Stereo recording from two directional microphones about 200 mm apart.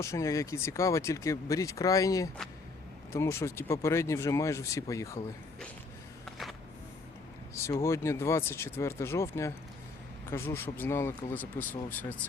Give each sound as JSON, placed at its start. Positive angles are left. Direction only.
{"t": 0.0, "sound": "speech", "side_deg": 15}
{"t": 7.5, "sound": "speech", "side_deg": 15}